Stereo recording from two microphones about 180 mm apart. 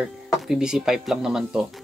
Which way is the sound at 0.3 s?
5° right (ahead or behind).